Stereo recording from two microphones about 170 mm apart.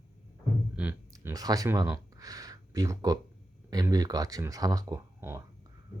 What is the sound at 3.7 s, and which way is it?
Speech, 20° right (ahead or behind).